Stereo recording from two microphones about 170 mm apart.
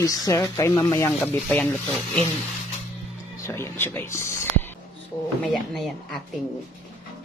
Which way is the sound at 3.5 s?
15° left (ahead or behind).